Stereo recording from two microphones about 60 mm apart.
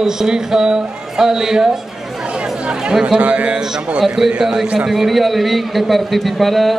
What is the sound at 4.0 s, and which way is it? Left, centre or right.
A man's voice, centre.